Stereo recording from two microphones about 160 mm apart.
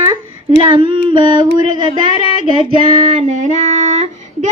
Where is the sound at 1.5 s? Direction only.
40° left (ahead or behind).